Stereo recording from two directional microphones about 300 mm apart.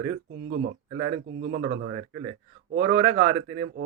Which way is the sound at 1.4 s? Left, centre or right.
Right.